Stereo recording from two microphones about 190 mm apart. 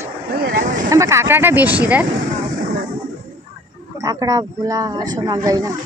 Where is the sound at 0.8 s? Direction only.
15° right (ahead or behind).